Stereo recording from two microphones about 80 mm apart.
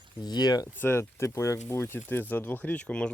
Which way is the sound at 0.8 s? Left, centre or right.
Left.